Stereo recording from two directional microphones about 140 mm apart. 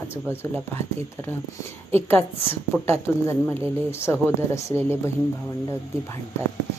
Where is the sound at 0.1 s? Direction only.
15° left (ahead or behind).